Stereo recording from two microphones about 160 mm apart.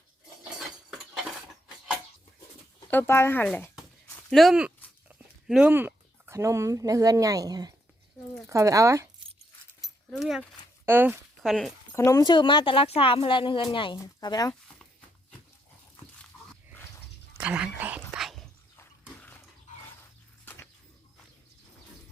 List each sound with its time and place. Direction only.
0.6 s cutlery: 5° right (ahead or behind)
2.9 s speech: 15° left (ahead or behind)
4.3 s speech: centre (ahead or behind); by 9.0 s 20° right (ahead or behind)
10.1 s speech: centre (ahead or behind)
10.8 s speech: 15° right (ahead or behind)
11.4 s speech: centre (ahead or behind)
11.9 s a woman's voice: 20° left (ahead or behind)
17.3 s a sound: 10° right (ahead or behind)
18.8 s a sound: 10° left (ahead or behind)
19.7 s dog: 50° left (ahead or behind)
20.4 s bird flight: 10° left (ahead or behind)